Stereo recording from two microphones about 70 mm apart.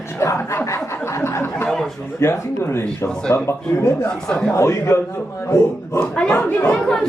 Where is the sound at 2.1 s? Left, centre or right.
Left.